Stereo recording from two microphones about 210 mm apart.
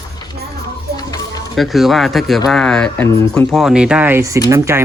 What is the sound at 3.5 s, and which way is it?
Speech, centre (ahead or behind).